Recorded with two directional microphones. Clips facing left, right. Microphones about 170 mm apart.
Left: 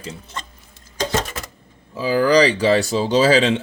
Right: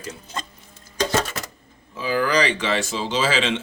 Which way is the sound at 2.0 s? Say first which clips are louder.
Left 6 dB; 35° left (ahead or behind).